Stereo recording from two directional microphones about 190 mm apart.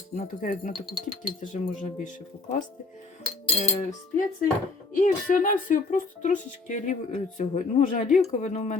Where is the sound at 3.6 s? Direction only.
35° left (ahead or behind).